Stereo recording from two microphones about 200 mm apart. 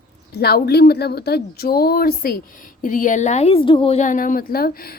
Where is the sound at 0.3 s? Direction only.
50° left (ahead or behind).